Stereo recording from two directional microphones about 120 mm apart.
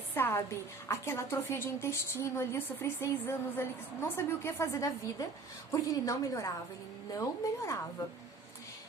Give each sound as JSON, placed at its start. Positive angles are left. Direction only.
{"t": 0.1, "sound": "a woman's voice", "side_deg": 20}